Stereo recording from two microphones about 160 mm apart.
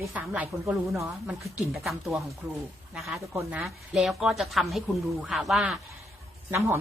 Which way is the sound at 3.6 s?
Centre (ahead or behind).